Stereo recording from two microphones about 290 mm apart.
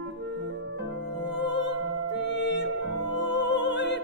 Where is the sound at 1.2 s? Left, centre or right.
Left.